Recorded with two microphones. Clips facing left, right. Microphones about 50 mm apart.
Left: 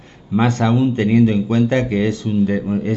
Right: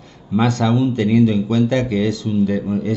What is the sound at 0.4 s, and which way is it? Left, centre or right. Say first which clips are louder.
A man's voice: left 1 dB; left.